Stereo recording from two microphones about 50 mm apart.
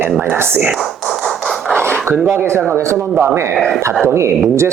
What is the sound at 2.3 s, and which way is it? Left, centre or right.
Speech, right.